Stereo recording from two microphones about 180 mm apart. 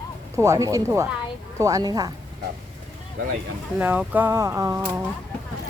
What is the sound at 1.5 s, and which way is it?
Speech, 20° right (ahead or behind).